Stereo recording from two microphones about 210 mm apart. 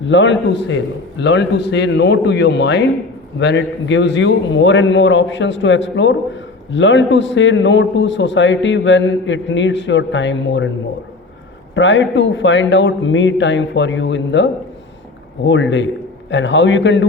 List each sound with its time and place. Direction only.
0.0 s a man's voice: 60° left (ahead or behind)
11.7 s a man's voice: 60° left (ahead or behind)